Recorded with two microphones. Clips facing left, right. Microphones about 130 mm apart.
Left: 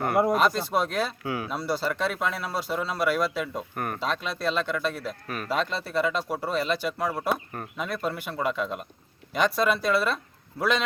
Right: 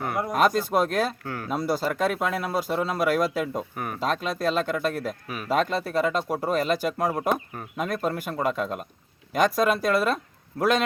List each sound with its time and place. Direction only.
0.3 s speech: 50° right (ahead or behind)
1.2 s speech: 10° left (ahead or behind)
1.5 s speech: 45° right (ahead or behind)
3.8 s speech: centre (ahead or behind)
4.0 s speech: 45° right (ahead or behind)